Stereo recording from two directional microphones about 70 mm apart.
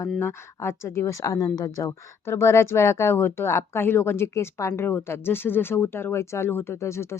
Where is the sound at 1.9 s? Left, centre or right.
Left.